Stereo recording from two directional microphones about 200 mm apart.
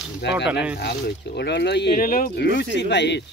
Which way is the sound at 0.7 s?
55° left (ahead or behind).